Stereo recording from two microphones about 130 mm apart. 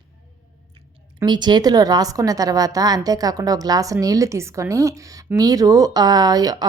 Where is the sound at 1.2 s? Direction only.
35° right (ahead or behind).